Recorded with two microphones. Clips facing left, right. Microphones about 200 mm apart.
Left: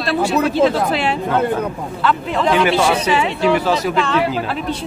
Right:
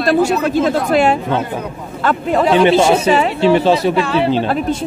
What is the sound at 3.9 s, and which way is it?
Speech, 10° right (ahead or behind).